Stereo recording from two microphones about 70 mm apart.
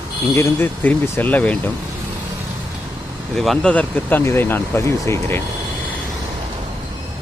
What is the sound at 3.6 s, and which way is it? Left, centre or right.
Speech, left.